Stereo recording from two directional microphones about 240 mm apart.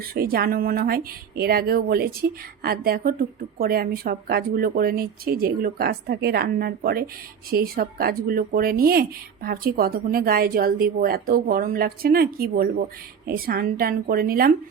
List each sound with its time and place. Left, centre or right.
0.1 s speech: right